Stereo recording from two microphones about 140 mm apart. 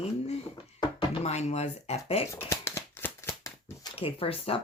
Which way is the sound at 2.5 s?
20° left (ahead or behind).